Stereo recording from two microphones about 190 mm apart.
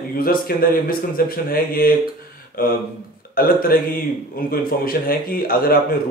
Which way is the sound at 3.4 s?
50° left (ahead or behind).